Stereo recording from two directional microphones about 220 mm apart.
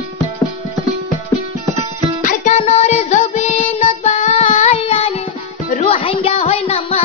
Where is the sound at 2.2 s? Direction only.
35° left (ahead or behind).